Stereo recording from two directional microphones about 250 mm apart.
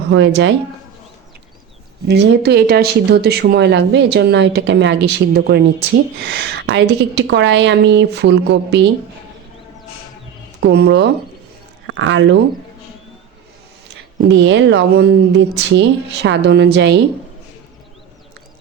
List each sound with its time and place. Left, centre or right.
0.1 s speech: right
2.0 s speech: right
10.6 s speech: right
13.8 s speech: right